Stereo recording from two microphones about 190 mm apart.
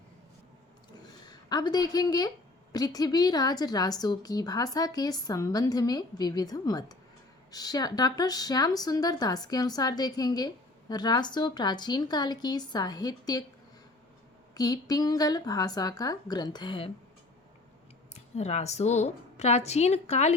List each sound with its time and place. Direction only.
1.3 s a woman's voice: 20° left (ahead or behind)
14.5 s speech: 20° left (ahead or behind)
18.1 s a woman's voice: 35° left (ahead or behind)